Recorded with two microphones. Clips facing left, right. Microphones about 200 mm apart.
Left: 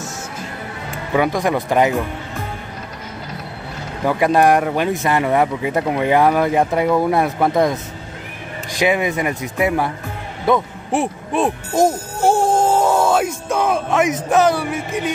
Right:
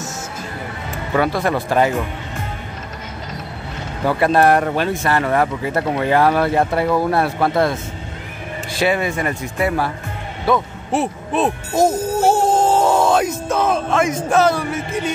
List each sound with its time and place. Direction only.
1.1 s speech: 15° left (ahead or behind)
4.0 s speech: 15° left (ahead or behind)
8.7 s speech: 15° left (ahead or behind)